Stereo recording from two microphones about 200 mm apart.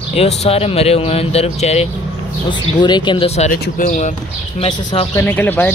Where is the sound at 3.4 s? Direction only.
45° left (ahead or behind).